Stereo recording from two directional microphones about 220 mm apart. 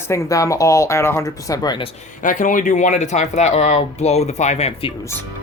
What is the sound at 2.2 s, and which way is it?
Speech, 35° left (ahead or behind).